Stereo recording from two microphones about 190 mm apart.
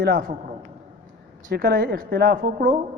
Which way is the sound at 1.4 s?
55° right (ahead or behind).